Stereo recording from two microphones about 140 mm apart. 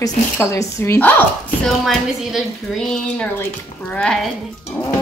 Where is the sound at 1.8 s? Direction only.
Centre (ahead or behind).